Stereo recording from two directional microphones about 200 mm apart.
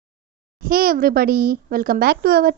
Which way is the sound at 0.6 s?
45° right (ahead or behind).